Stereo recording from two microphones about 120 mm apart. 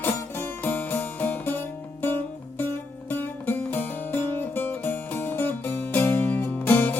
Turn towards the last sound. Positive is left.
turn(degrees=15)  # may be behind; listen again after turning